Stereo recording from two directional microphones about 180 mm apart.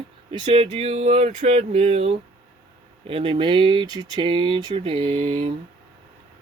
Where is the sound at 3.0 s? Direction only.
30° right (ahead or behind).